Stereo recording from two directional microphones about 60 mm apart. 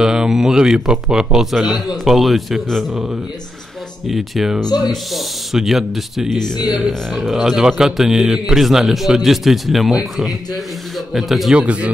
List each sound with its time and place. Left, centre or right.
0.0 s speech: centre
4.1 s a man's voice: centre
7.2 s a man's voice: centre
11.1 s a man's voice: centre
11.5 s speech: right